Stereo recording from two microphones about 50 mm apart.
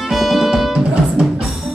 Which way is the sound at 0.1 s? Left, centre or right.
Centre.